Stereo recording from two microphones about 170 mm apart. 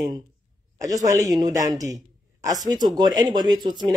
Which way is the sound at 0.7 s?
20° right (ahead or behind).